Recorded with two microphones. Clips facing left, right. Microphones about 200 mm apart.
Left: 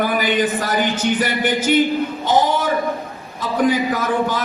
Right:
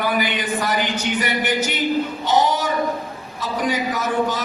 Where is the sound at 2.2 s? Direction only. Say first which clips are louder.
Left 2 dB; 55° left (ahead or behind).